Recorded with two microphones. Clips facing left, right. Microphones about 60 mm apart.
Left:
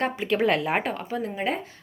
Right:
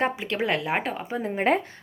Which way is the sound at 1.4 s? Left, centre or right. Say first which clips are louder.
Right 8 dB; right.